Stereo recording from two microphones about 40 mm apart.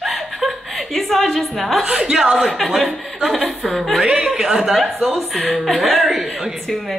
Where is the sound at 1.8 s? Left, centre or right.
Centre.